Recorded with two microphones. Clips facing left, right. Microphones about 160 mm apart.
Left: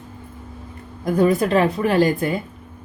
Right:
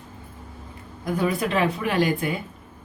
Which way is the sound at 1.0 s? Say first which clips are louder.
Left 7 dB; 40° left (ahead or behind).